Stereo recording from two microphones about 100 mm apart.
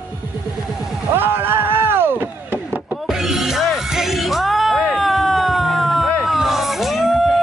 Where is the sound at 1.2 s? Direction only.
20° right (ahead or behind).